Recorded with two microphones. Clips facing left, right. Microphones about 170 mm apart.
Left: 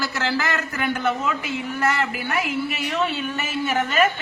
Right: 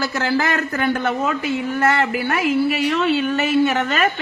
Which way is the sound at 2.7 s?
65° right (ahead or behind).